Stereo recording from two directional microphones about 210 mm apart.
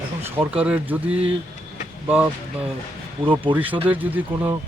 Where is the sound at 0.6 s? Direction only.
5° right (ahead or behind).